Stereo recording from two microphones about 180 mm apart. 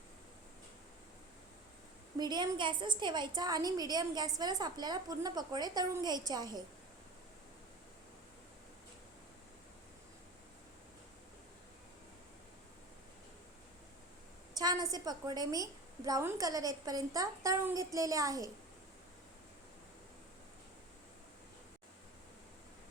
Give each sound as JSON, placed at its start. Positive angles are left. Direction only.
{"t": 2.1, "sound": "a woman's voice", "side_deg": -25}
{"t": 14.5, "sound": "a woman's voice", "side_deg": -20}